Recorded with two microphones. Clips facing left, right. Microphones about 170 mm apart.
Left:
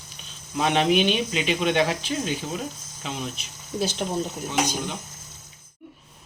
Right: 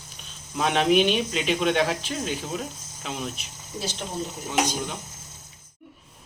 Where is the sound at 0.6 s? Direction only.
Centre (ahead or behind).